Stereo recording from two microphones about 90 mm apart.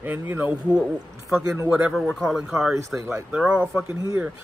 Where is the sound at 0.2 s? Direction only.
20° right (ahead or behind).